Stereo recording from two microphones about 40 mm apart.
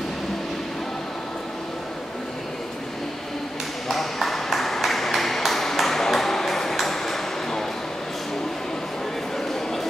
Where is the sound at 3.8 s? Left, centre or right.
Centre.